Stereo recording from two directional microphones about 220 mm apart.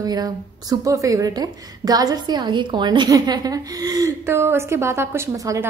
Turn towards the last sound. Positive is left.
turn(degrees=-10)  # may be behind; listen again after turning